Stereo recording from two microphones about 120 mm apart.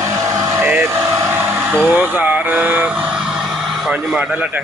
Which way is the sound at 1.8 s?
15° right (ahead or behind).